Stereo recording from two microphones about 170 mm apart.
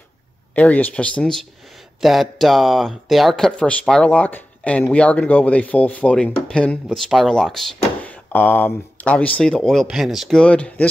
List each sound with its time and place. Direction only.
0.6 s speech: 10° left (ahead or behind)